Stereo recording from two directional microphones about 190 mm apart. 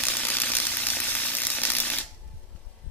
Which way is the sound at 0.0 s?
10° left (ahead or behind).